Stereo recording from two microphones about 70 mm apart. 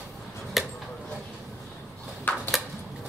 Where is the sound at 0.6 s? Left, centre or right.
Centre.